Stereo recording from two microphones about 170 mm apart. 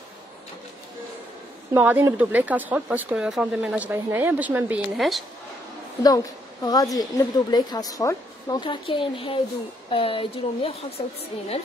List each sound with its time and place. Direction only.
1.7 s speech: 10° right (ahead or behind)
6.0 s a woman's voice: 25° left (ahead or behind)